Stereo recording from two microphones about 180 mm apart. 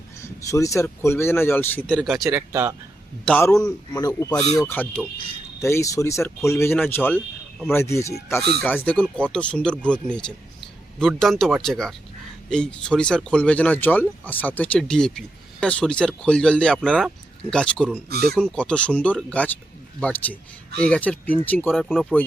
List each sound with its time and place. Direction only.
0.2 s speech: 15° left (ahead or behind); by 2.4 s centre (ahead or behind)
2.5 s speech: 15° right (ahead or behind)
3.2 s speech: 5° left (ahead or behind)
3.6 s speech: 20° left (ahead or behind)
18.1 s speech: 60° right (ahead or behind)
18.3 s speech: 5° left (ahead or behind)